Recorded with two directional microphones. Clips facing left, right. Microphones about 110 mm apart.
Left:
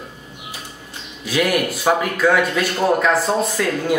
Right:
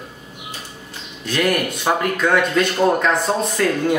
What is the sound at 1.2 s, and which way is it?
Speech, 5° left (ahead or behind).